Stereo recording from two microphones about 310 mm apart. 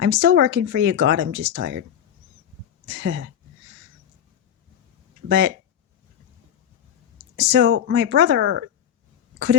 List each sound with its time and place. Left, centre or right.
0.0 s speech: right
2.8 s speech: right
5.3 s speech: right
7.3 s speech: right